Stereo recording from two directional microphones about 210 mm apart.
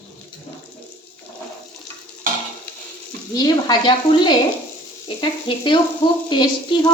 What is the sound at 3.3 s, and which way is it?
A woman's voice, 20° left (ahead or behind).